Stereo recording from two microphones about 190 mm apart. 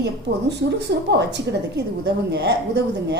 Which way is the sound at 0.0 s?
60° right (ahead or behind).